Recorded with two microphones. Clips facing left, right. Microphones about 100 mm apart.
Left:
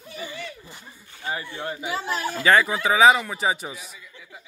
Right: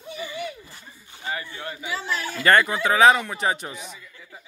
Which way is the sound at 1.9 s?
45° left (ahead or behind).